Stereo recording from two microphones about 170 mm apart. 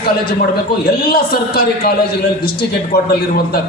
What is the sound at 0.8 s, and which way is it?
A man's voice, 65° left (ahead or behind).